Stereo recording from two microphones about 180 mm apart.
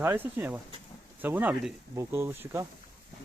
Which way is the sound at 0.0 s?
10° right (ahead or behind).